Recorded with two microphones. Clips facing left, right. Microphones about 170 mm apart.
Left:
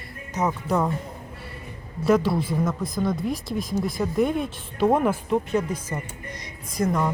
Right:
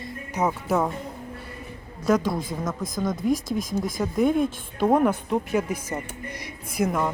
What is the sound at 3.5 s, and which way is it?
Speech, 45° right (ahead or behind).